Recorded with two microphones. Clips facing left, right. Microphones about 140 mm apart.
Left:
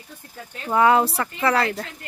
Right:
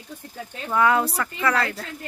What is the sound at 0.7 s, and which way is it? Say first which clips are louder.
Speech: left 3 dB; 25° left (ahead or behind).